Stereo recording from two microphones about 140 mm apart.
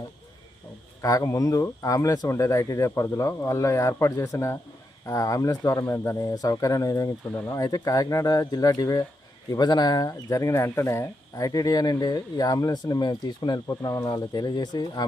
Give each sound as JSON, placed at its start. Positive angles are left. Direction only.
{"t": 1.0, "sound": "speech", "side_deg": 25}